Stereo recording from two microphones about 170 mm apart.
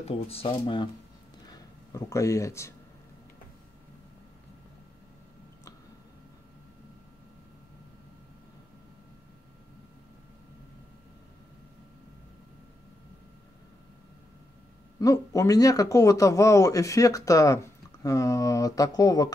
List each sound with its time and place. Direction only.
0.0 s speech: 35° left (ahead or behind)
1.5 s speech: 20° left (ahead or behind)
15.0 s speech: 20° left (ahead or behind)